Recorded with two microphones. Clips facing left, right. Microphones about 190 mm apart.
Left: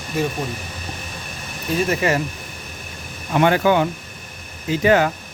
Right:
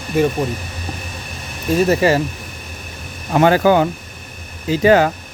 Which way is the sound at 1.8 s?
30° right (ahead or behind).